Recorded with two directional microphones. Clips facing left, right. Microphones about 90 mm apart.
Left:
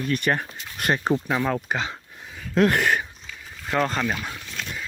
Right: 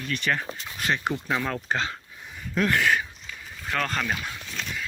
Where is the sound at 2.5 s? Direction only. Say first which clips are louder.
Left 4 dB; 60° left (ahead or behind).